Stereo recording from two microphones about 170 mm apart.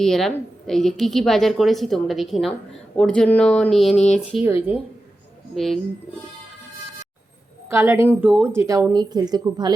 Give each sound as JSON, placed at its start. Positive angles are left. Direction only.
{"t": 0.0, "sound": "a woman's voice", "side_deg": 0}
{"t": 5.5, "sound": "a woman's voice", "side_deg": 0}
{"t": 7.7, "sound": "a woman's voice", "side_deg": -15}